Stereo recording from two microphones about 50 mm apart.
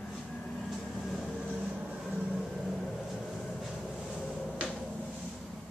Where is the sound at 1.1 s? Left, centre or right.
Centre.